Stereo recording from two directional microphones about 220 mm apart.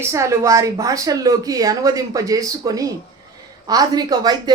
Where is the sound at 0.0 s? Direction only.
15° right (ahead or behind).